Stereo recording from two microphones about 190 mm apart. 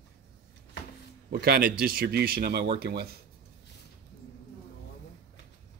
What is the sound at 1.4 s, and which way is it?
Speech, 55° right (ahead or behind).